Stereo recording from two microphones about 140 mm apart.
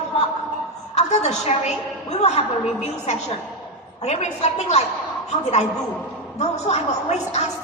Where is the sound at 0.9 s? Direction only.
50° left (ahead or behind).